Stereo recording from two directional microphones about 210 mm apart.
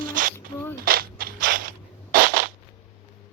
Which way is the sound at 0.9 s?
45° right (ahead or behind).